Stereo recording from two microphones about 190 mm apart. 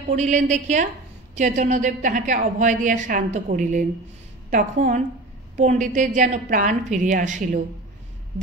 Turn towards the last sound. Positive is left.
turn(degrees=-40)  # may be behind; listen again after turning